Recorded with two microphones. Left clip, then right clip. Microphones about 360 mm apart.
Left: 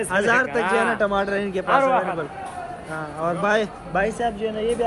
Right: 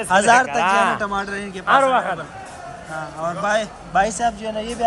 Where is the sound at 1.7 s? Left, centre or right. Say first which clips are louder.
Right 3 dB; right.